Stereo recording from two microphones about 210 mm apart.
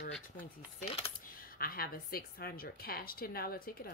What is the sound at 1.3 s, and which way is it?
A woman's voice, 45° left (ahead or behind).